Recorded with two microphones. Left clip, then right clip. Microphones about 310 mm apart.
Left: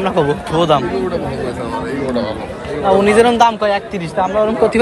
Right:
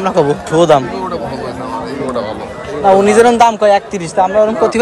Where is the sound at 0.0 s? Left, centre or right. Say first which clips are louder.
Right 3 dB; right.